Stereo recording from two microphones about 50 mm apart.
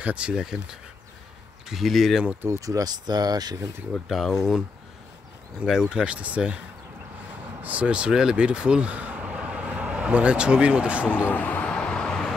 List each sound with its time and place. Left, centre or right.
0.0 s speech: right
1.7 s speech: centre
2.8 s speech: right
4.1 s speech: centre
5.7 s speech: centre
7.6 s speech: right
9.2 s vehicle: centre
9.7 s speech: right
11.1 s speech: left
11.6 s vehicle: centre